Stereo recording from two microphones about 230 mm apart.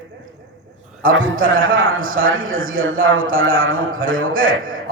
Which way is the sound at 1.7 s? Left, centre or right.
Right.